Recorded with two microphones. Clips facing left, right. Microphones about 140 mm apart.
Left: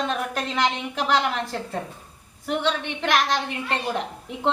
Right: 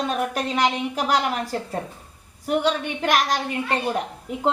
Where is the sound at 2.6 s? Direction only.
40° right (ahead or behind).